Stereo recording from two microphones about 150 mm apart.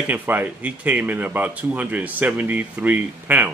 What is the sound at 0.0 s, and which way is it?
Speech, 10° right (ahead or behind).